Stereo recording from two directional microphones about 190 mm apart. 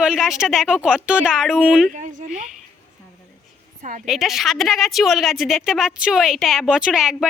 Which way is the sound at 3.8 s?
40° right (ahead or behind).